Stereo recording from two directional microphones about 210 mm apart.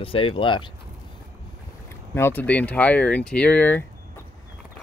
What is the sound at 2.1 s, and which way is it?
Speech, 10° left (ahead or behind).